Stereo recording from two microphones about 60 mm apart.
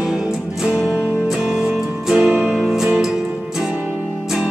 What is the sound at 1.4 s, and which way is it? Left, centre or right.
Music, centre.